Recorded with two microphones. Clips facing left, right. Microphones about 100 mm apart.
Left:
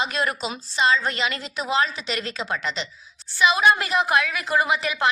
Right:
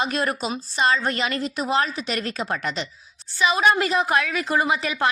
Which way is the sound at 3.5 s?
35° right (ahead or behind).